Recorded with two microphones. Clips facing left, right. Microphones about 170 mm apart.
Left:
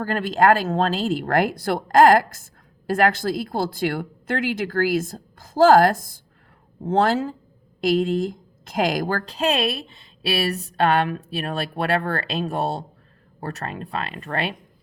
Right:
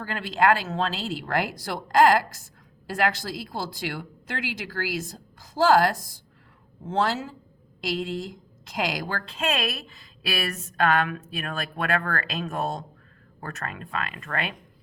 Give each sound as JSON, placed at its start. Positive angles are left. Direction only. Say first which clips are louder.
{"t": 0.0, "sound": "a woman's voice", "louder": "left 5 dB", "side_deg": 50}